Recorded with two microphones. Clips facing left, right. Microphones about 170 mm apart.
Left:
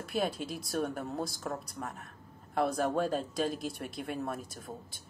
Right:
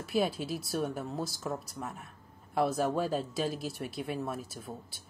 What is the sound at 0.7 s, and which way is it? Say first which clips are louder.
Speech: left 1 dB; centre (ahead or behind).